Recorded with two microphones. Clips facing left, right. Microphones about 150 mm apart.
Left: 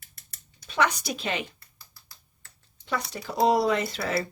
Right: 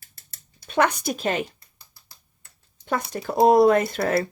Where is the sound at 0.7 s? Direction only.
50° right (ahead or behind).